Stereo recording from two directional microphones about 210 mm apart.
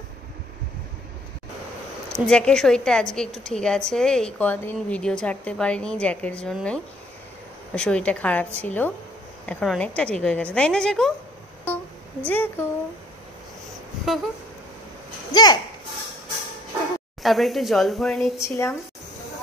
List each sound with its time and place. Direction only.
2.2 s a woman's voice: 5° left (ahead or behind)
11.6 s a sound: 5° left (ahead or behind)
14.1 s a woman's voice: centre (ahead or behind)
15.3 s speech: 20° left (ahead or behind)
17.2 s a woman's voice: centre (ahead or behind)
18.4 s speech: 15° left (ahead or behind)